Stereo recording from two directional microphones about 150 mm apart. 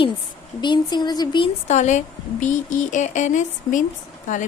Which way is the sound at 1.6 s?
50° left (ahead or behind).